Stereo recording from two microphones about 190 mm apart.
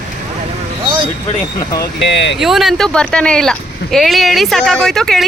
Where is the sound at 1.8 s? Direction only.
65° left (ahead or behind).